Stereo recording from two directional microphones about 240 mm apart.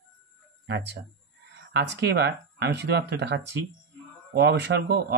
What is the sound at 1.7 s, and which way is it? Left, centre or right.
Speech, right.